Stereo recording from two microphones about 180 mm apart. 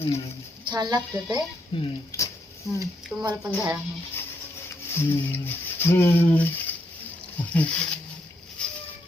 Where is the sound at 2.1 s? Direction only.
15° left (ahead or behind).